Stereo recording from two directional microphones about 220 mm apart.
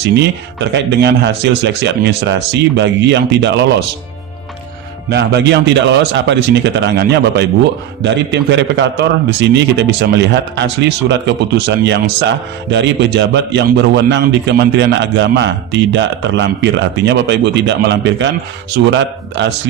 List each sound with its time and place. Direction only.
0.0 s a man's voice: 50° right (ahead or behind)
5.0 s a man's voice: 50° right (ahead or behind)